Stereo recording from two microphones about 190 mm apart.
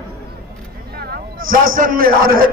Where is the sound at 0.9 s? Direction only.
50° right (ahead or behind).